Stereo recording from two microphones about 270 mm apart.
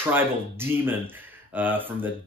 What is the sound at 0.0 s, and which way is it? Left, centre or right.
Speech, centre.